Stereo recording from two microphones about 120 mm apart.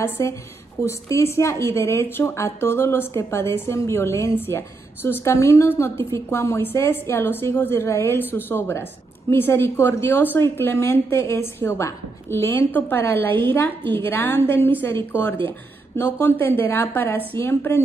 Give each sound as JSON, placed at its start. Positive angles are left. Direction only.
{"t": 0.0, "sound": "a woman's voice", "side_deg": 20}